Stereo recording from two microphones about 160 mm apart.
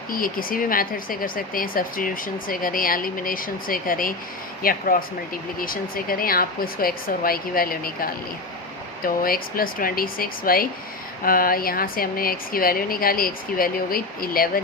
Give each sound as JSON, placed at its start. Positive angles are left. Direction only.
{"t": 0.1, "sound": "speech", "side_deg": 60}